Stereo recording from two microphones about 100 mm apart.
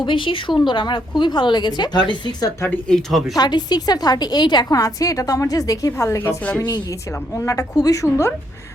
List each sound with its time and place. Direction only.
0.0 s a woman's voice: 55° left (ahead or behind)
2.8 s speech: 5° left (ahead or behind)
3.3 s a woman's voice: 45° left (ahead or behind); by 6.3 s 25° left (ahead or behind)
6.4 s a woman's voice: 15° left (ahead or behind)
7.3 s a woman's voice: 30° left (ahead or behind)